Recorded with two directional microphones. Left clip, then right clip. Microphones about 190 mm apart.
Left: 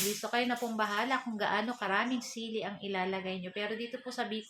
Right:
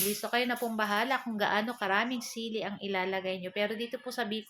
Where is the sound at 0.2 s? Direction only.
45° right (ahead or behind).